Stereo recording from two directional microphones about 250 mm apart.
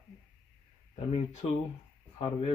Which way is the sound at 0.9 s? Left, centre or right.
Left.